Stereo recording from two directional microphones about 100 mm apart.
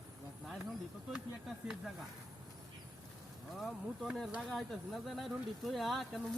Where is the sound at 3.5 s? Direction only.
Centre (ahead or behind).